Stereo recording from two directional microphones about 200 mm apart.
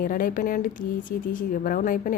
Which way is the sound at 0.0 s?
45° left (ahead or behind).